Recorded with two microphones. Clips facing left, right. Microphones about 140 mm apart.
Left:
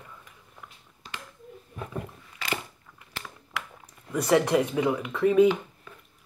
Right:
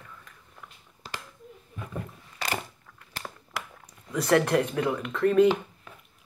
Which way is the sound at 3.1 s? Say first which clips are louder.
Even; 35° right (ahead or behind).